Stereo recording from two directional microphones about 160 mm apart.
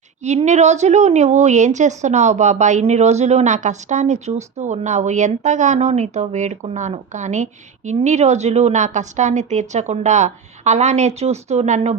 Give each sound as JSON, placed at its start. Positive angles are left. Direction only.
{"t": 0.2, "sound": "a woman's voice", "side_deg": -45}